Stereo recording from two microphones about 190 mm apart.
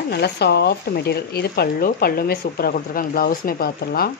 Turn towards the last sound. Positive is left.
turn(degrees=55)  # may be behind; listen again after turning